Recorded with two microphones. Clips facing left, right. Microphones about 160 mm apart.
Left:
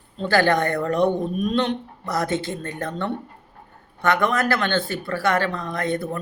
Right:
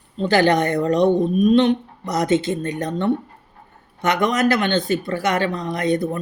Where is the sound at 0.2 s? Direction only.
20° right (ahead or behind).